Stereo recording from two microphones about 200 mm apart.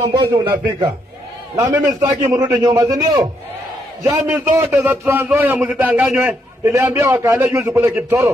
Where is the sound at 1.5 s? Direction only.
15° right (ahead or behind).